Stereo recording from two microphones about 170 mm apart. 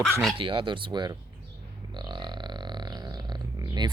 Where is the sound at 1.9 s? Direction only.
25° right (ahead or behind).